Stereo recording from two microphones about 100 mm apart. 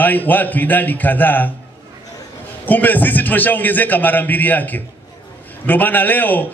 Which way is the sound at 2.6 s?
15° left (ahead or behind).